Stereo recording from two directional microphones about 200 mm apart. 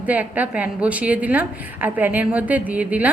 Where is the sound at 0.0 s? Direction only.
10° right (ahead or behind).